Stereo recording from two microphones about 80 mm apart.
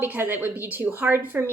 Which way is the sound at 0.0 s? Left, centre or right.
Right.